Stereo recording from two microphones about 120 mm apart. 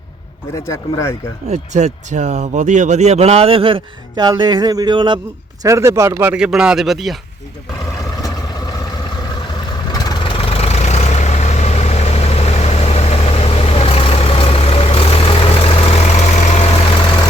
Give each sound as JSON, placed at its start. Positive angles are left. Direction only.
{"t": 0.5, "sound": "speech", "side_deg": 25}
{"t": 1.5, "sound": "speech", "side_deg": -75}
{"t": 4.2, "sound": "speech", "side_deg": -35}
{"t": 5.6, "sound": "speech", "side_deg": -25}
{"t": 6.3, "sound": "speech", "side_deg": -5}
{"t": 9.9, "sound": "vehicle", "side_deg": 35}